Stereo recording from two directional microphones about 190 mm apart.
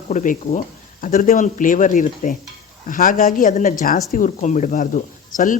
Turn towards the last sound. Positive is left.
turn(degrees=45)  # may be behind; listen again after turning